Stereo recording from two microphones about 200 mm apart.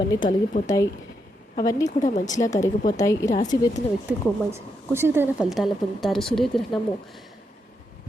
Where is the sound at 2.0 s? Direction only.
40° left (ahead or behind).